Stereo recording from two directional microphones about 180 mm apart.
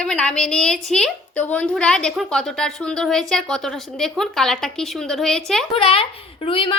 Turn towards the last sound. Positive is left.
turn(degrees=30)  # may be behind; listen again after turning